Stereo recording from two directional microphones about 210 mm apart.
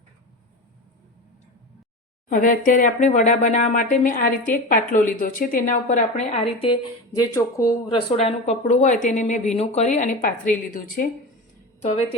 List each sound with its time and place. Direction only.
2.3 s speech: 40° left (ahead or behind)
11.8 s a woman's voice: 30° left (ahead or behind)